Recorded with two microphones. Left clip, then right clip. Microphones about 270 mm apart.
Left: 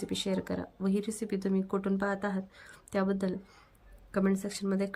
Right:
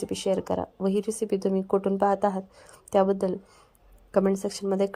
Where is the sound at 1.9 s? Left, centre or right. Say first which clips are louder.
Right 10 dB; right.